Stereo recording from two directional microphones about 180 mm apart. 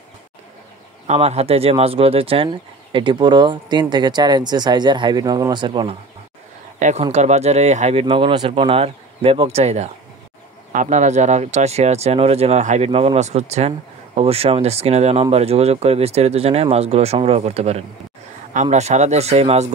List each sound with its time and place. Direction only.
1.0 s speech: 35° right (ahead or behind)
6.8 s speech: 40° right (ahead or behind)